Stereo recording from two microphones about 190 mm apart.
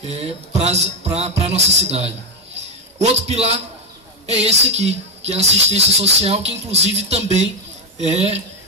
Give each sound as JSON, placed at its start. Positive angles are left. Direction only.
{"t": 0.0, "sound": "a woman's voice", "side_deg": -35}